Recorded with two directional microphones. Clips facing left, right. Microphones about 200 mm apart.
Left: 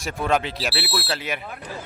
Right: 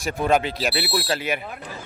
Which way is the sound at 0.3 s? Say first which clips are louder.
Right 2 dB; centre (ahead or behind).